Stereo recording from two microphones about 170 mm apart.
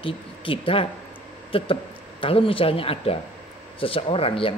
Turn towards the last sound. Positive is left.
turn(degrees=35)  # may be behind; listen again after turning